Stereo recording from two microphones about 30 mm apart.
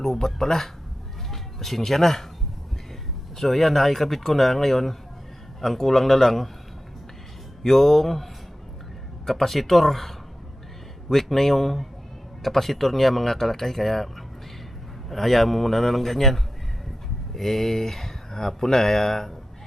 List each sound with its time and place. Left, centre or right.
0.0 s speech: centre
3.3 s speech: centre
7.6 s speech: centre
15.1 s a man's voice: centre